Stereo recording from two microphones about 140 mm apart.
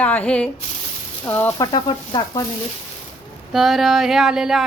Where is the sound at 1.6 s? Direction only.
30° left (ahead or behind).